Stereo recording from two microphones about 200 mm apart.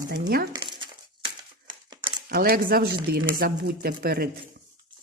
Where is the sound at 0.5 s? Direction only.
20° right (ahead or behind).